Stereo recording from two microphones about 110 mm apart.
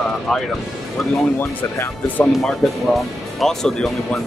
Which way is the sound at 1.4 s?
20° left (ahead or behind).